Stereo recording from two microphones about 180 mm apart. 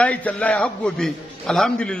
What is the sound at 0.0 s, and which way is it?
A man's voice, 10° left (ahead or behind).